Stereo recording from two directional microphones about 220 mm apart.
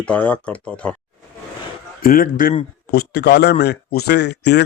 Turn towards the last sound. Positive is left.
turn(degrees=50)  # may be behind; listen again after turning